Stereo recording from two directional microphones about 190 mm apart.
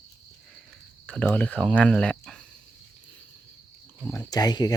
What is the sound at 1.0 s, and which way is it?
Speech, 5° left (ahead or behind).